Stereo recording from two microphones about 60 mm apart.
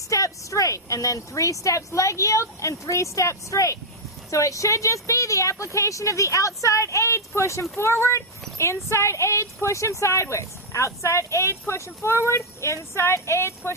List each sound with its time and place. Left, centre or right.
0.1 s a woman's voice: left